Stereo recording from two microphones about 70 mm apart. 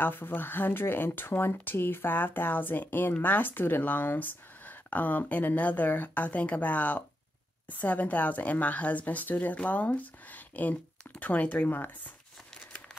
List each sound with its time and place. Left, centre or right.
0.0 s speech: left